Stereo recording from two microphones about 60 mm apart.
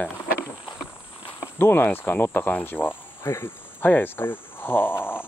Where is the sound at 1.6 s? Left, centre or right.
Left.